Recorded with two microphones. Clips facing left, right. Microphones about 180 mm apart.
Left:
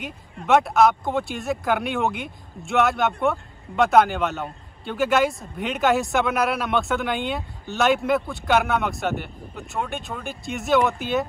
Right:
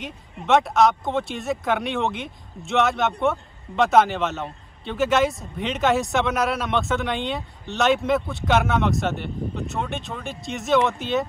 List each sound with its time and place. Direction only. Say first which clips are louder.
0.0 s speech: even; centre (ahead or behind)